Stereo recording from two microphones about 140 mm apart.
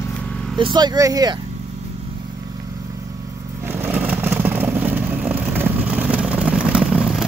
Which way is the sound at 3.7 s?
10° right (ahead or behind).